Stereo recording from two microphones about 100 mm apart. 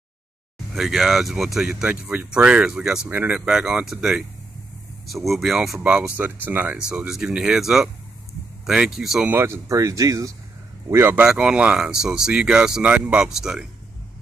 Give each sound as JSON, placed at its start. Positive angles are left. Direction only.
{"t": 0.7, "sound": "speech", "side_deg": -5}
{"t": 5.8, "sound": "speech", "side_deg": -10}
{"t": 9.3, "sound": "a man's voice", "side_deg": -30}
{"t": 11.1, "sound": "speech", "side_deg": -10}